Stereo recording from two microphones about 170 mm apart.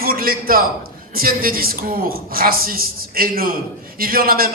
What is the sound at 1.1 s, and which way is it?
A man's voice, 60° right (ahead or behind).